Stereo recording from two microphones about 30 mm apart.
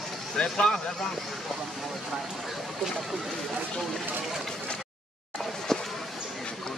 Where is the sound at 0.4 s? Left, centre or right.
Left.